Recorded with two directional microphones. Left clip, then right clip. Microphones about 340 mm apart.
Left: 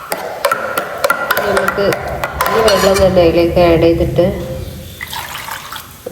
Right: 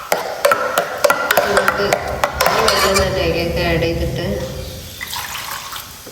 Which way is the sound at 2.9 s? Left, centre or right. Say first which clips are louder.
Left 7 dB; centre.